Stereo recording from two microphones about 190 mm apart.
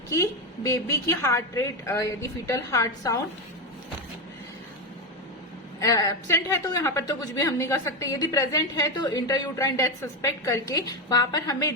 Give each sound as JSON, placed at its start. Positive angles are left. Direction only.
{"t": 0.2, "sound": "a woman's voice", "side_deg": 15}
{"t": 5.8, "sound": "a woman's voice", "side_deg": 20}